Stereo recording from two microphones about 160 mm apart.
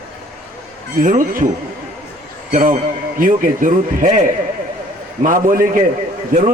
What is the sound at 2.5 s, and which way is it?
A man's voice, 55° right (ahead or behind).